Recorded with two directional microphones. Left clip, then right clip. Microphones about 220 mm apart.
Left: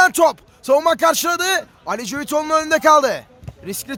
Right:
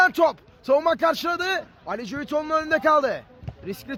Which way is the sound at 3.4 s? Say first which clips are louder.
Left 4 dB; 20° left (ahead or behind).